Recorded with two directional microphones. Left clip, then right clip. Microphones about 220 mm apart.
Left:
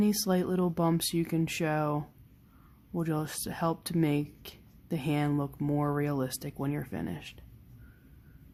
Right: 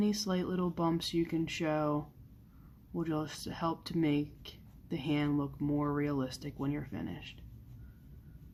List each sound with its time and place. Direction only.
0.0 s speech: 50° left (ahead or behind)